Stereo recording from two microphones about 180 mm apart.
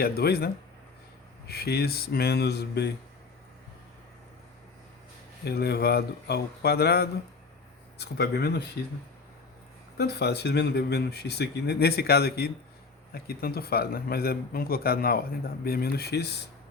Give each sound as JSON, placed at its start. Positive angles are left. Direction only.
{"t": 0.0, "sound": "speech", "side_deg": 60}
{"t": 5.5, "sound": "speech", "side_deg": 65}
{"t": 10.0, "sound": "speech", "side_deg": 65}